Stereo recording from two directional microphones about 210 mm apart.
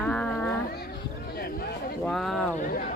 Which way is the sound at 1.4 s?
45° left (ahead or behind).